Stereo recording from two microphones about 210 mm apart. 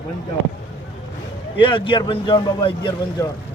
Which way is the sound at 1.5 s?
25° left (ahead or behind).